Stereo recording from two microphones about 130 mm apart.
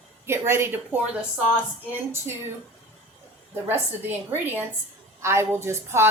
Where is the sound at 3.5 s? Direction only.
15° right (ahead or behind).